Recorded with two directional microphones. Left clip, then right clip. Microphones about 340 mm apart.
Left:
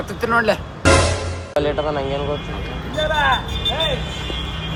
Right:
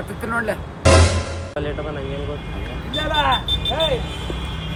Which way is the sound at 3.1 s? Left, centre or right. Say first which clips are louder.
Even; right.